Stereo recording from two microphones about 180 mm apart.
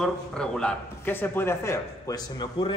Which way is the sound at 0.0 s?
5° left (ahead or behind).